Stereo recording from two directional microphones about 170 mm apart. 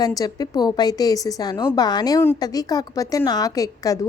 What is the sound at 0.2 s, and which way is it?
A woman's voice, 25° left (ahead or behind).